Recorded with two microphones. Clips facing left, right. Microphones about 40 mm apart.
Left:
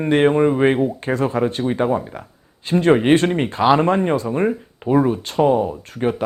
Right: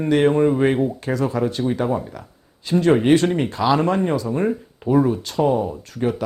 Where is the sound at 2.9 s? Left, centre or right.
Left.